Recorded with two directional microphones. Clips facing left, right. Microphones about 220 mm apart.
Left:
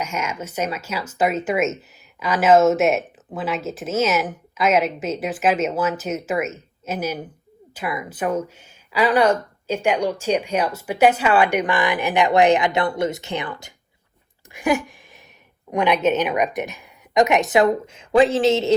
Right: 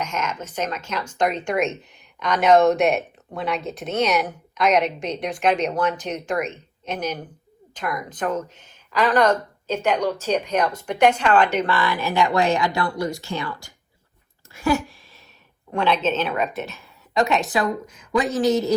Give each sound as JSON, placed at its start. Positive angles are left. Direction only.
{"t": 0.0, "sound": "speech", "side_deg": 10}
{"t": 14.5, "sound": "a sound", "side_deg": 15}
{"t": 15.7, "sound": "speech", "side_deg": 15}